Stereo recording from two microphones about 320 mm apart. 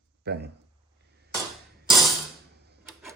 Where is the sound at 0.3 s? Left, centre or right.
Right.